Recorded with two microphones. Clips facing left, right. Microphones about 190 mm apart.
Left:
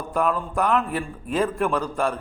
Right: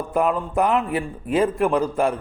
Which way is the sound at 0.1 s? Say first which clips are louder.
Right 2 dB; 20° right (ahead or behind).